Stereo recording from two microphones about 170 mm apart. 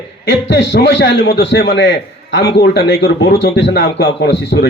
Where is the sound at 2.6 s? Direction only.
75° left (ahead or behind).